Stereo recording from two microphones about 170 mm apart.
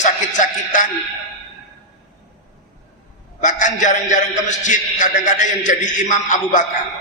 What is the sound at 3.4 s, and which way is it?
A man's voice, 45° left (ahead or behind).